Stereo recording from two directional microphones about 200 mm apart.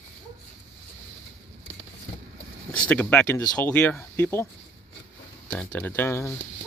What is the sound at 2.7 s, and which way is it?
Speech, 5° left (ahead or behind).